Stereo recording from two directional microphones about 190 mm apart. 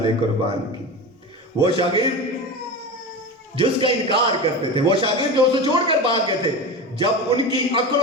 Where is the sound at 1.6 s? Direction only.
25° right (ahead or behind).